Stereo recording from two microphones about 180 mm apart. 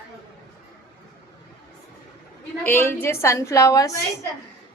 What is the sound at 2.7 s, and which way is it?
A woman's voice, 10° left (ahead or behind).